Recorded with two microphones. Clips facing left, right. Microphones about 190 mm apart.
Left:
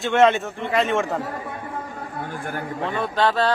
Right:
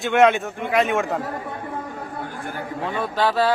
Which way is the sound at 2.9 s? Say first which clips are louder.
Even; 5° right (ahead or behind).